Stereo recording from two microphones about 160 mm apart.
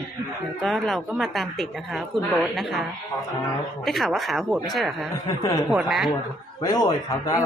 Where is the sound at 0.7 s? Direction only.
Centre (ahead or behind).